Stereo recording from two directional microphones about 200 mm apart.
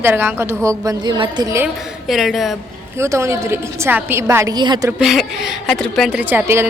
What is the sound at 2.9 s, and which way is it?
A woman's voice, 15° right (ahead or behind).